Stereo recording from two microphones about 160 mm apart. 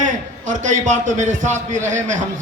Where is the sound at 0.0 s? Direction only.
50° right (ahead or behind).